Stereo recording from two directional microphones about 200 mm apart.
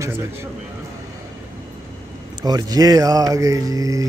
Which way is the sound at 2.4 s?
20° right (ahead or behind).